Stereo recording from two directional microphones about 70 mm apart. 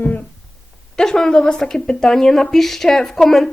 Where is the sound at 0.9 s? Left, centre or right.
Centre.